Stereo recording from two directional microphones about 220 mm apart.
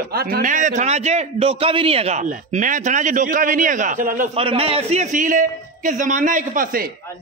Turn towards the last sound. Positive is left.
turn(degrees=-40)  # may be behind; listen again after turning